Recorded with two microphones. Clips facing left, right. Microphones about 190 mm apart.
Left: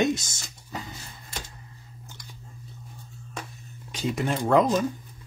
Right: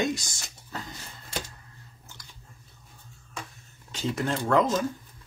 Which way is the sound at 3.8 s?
15° left (ahead or behind).